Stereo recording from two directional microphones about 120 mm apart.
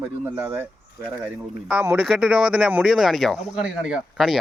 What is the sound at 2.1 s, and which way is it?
Speech, 5° right (ahead or behind).